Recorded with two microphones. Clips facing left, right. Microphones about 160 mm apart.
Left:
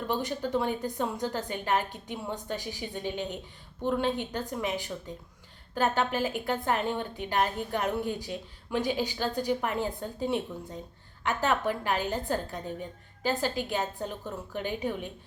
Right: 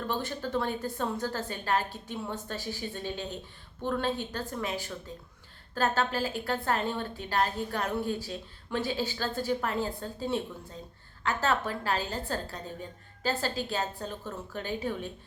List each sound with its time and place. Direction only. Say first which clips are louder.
0.1 s a woman's voice: left 3 dB; 15° left (ahead or behind)